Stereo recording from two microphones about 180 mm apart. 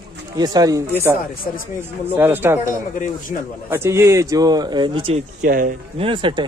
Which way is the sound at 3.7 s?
15° right (ahead or behind).